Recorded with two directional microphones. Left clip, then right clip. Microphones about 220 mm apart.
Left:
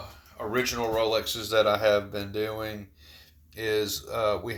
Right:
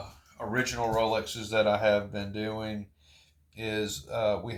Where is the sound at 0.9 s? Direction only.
20° left (ahead or behind).